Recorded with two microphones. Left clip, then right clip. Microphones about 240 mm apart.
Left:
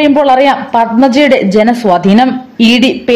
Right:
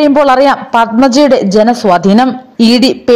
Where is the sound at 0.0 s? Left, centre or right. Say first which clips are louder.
Even; right.